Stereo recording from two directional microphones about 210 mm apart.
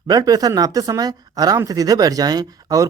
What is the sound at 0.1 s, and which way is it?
Speech, 15° right (ahead or behind).